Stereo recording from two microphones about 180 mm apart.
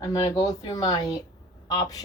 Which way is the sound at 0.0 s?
20° left (ahead or behind).